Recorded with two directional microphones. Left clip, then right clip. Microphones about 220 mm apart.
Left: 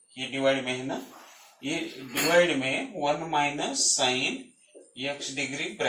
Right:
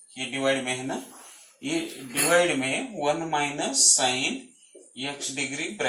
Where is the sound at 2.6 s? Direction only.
20° right (ahead or behind).